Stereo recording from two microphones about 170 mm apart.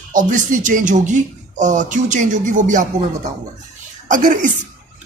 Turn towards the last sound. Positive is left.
turn(degrees=-50)  # may be behind; listen again after turning